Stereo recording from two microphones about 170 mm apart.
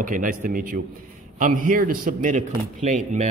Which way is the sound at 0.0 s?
50° right (ahead or behind).